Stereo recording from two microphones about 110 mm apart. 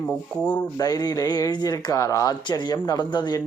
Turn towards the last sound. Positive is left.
turn(degrees=40)  # may be behind; listen again after turning